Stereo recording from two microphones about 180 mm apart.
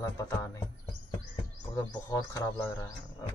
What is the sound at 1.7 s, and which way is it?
Speech, 15° left (ahead or behind).